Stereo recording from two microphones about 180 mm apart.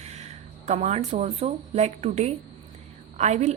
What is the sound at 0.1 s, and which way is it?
A woman's voice, 40° right (ahead or behind).